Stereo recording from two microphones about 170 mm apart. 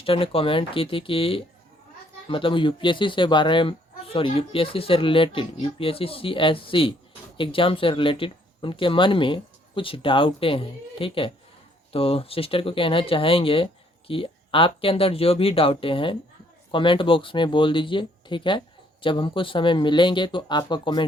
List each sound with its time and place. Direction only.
0.0 s speech: 30° left (ahead or behind)